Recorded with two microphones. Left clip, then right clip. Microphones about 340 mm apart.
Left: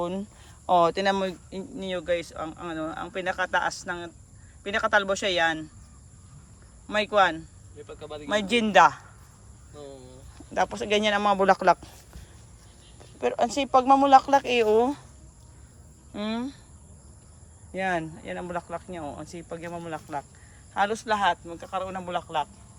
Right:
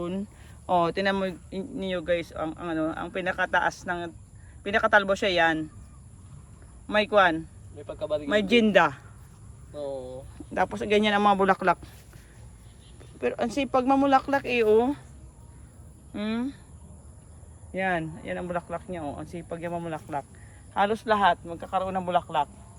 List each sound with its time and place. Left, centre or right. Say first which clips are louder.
0.0 s speech: left 3 dB; centre
6.8 s speech: right 1 dB; centre
7.9 s speech: right 10 dB; centre
8.3 s speech: right 1 dB; centre
10.5 s speech: even; centre
13.1 s speech: left 2 dB; centre
16.1 s speech: even; centre
17.7 s speech: even; centre